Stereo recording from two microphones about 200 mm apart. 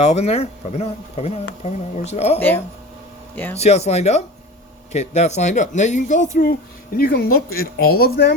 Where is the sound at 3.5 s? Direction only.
30° left (ahead or behind); by 8.3 s 55° left (ahead or behind).